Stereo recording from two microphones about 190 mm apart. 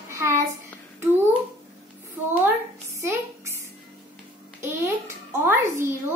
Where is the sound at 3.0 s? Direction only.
15° right (ahead or behind).